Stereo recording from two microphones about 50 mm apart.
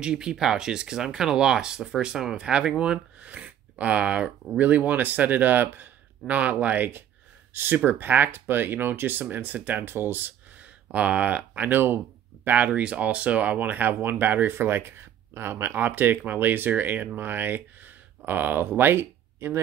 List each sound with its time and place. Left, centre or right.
0.0 s speech: centre; by 9.8 s right
9.8 s speech: right
14.5 s speech: right